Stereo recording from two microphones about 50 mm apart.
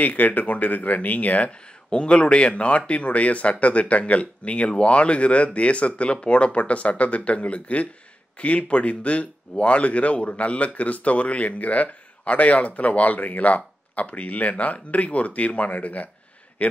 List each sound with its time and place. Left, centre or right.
0.0 s speech: left